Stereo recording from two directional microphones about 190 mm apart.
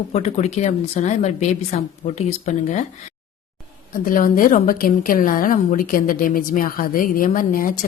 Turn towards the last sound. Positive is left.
turn(degrees=45)  # may be behind; listen again after turning